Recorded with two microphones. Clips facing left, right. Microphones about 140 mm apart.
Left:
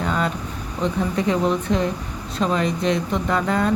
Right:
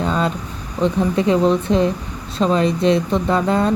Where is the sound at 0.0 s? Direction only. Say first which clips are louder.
Right 3 dB; 25° right (ahead or behind).